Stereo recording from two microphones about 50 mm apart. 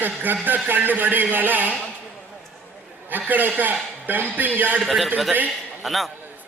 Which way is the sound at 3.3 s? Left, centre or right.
Right.